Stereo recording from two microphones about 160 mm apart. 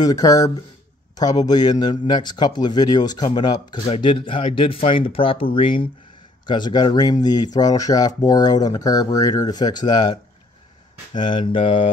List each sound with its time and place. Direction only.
0.0 s a man's voice: 20° left (ahead or behind)
11.1 s speech: 30° left (ahead or behind)